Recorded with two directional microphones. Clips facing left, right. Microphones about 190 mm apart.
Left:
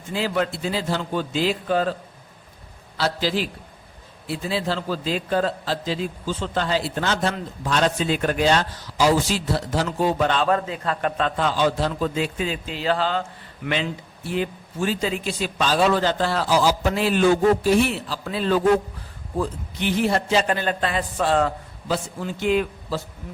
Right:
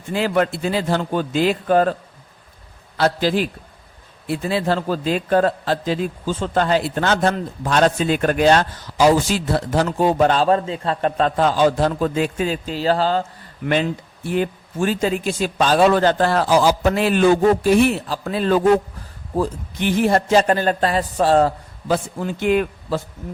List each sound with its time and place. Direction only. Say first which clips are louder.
0.1 s a man's voice: right 5 dB; 55° right (ahead or behind)
3.0 s a man's voice: right 5 dB; 50° right (ahead or behind)
14.3 s a man's voice: right 4 dB; 50° right (ahead or behind)
21.9 s a man's voice: right 5 dB; 55° right (ahead or behind)